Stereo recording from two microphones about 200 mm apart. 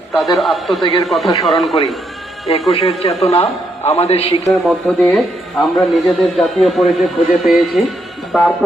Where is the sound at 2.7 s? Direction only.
30° left (ahead or behind).